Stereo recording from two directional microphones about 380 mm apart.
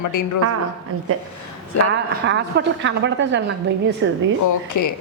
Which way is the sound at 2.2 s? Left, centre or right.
Right.